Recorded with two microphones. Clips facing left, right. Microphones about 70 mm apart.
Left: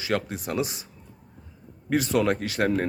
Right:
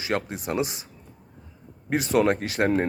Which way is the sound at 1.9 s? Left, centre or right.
Right.